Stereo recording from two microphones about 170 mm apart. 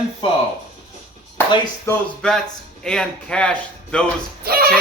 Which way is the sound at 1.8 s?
5° left (ahead or behind).